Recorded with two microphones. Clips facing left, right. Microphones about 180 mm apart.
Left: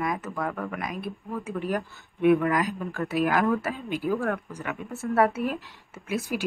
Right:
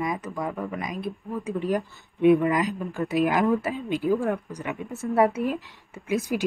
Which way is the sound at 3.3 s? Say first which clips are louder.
Right 2 dB; 15° right (ahead or behind).